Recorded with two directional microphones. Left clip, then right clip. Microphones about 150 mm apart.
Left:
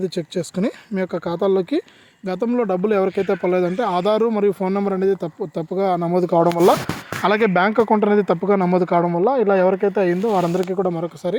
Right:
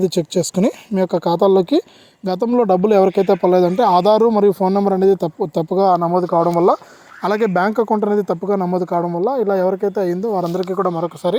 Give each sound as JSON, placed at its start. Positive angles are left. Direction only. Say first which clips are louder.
{"t": 0.0, "sound": "speech", "louder": "right 6 dB", "side_deg": -40}
{"t": 3.8, "sound": "speech", "louder": "right 7 dB", "side_deg": 0}
{"t": 4.1, "sound": "speech", "louder": "right 5 dB", "side_deg": -25}
{"t": 5.9, "sound": "speech", "louder": "right 3 dB", "side_deg": 15}
{"t": 7.2, "sound": "speech", "louder": "even", "side_deg": -15}
{"t": 11.2, "sound": "speech", "louder": "right 5 dB", "side_deg": -10}